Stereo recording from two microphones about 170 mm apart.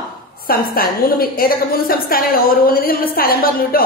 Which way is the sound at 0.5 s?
60° left (ahead or behind).